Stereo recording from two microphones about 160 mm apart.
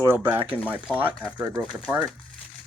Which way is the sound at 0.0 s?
15° right (ahead or behind).